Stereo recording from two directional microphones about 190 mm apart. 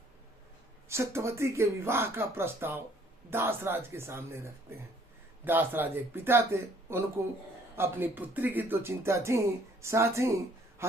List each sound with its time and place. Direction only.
0.9 s speech: 15° right (ahead or behind)